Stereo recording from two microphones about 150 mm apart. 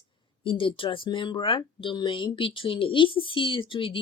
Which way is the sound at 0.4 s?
35° left (ahead or behind).